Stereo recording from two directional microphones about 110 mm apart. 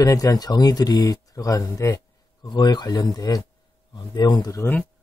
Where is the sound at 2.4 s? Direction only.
40° left (ahead or behind).